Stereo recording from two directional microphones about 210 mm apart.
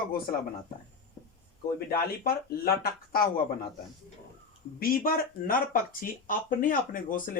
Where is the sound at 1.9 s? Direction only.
45° left (ahead or behind).